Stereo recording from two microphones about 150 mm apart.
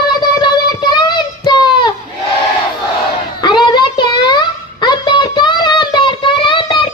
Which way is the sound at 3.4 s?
30° left (ahead or behind).